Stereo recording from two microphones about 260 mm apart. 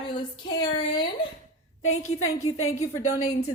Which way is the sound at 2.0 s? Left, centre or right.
Left.